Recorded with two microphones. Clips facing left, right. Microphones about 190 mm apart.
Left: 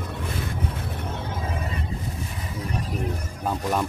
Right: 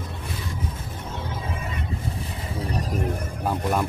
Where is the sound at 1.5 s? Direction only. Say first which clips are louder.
Left 1 dB; 35° left (ahead or behind).